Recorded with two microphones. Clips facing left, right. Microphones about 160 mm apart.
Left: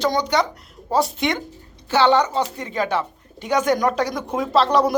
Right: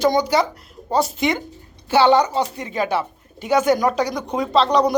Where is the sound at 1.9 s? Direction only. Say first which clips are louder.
Right 2 dB; 10° right (ahead or behind).